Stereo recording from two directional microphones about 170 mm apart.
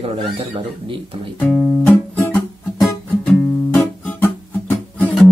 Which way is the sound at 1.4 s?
10° left (ahead or behind).